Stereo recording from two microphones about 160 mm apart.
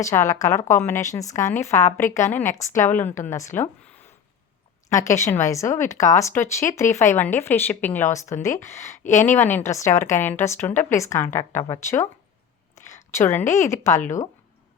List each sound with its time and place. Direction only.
0.0 s speech: 20° left (ahead or behind)
4.9 s speech: 20° left (ahead or behind)
13.1 s speech: 15° left (ahead or behind)